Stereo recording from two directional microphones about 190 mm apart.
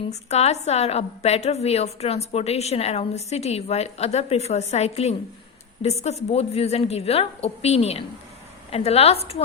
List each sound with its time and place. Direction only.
0.1 s a woman's voice: 35° left (ahead or behind)